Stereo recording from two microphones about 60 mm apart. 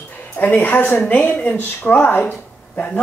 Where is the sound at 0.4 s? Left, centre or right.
Left.